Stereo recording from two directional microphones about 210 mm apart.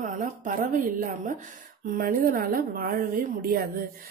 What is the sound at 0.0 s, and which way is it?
A woman's voice, 40° right (ahead or behind).